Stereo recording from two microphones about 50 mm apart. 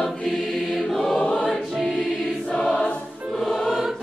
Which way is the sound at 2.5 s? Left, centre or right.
Centre.